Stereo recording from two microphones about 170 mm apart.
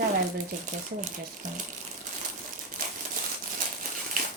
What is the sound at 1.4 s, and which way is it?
Speech, 50° right (ahead or behind).